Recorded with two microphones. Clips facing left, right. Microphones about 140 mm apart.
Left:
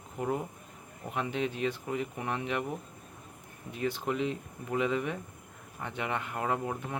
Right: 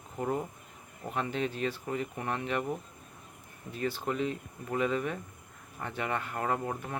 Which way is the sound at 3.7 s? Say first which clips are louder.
Left 1 dB; 20° left (ahead or behind).